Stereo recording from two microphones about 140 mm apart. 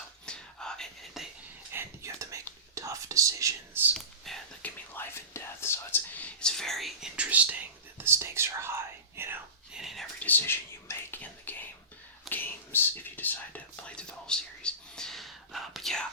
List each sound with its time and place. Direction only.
0.3 s whispering: 5° left (ahead or behind)
1.7 s whispering: 20° right (ahead or behind)
3.9 s whispering: 5° left (ahead or behind)
4.9 s whispering: 20° left (ahead or behind); by 9.4 s 15° right (ahead or behind)
9.7 s whispering: centre (ahead or behind)
10.2 s whispering: 15° left (ahead or behind)